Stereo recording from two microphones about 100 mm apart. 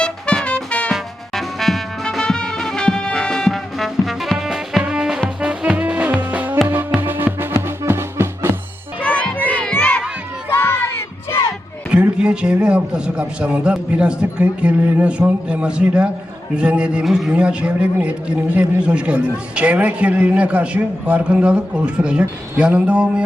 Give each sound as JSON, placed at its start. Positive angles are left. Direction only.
{"t": 0.0, "sound": "music", "side_deg": 10}
{"t": 0.9, "sound": "music", "side_deg": 0}
{"t": 9.0, "sound": "music", "side_deg": 10}
{"t": 9.5, "sound": "crowd", "side_deg": 15}
{"t": 10.5, "sound": "crowd", "side_deg": 25}
{"t": 11.9, "sound": "a man's voice", "side_deg": -10}